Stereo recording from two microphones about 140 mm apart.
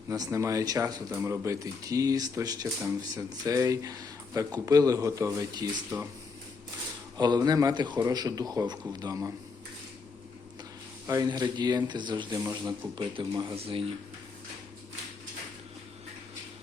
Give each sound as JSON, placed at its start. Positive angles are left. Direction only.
{"t": 0.1, "sound": "speech", "side_deg": -20}
{"t": 7.2, "sound": "speech", "side_deg": -30}
{"t": 11.0, "sound": "speech", "side_deg": -25}
{"t": 12.4, "sound": "speech", "side_deg": -20}
{"t": 13.6, "sound": "speech", "side_deg": -45}